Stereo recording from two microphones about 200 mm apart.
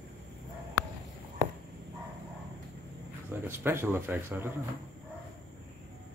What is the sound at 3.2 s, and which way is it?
Speech, 10° right (ahead or behind).